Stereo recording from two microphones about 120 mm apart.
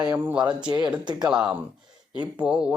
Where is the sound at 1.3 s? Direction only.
5° right (ahead or behind).